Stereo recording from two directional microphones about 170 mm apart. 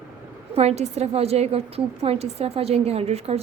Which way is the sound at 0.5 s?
35° right (ahead or behind).